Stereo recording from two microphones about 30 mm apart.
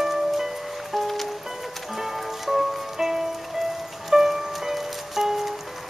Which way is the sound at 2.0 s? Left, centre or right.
Centre.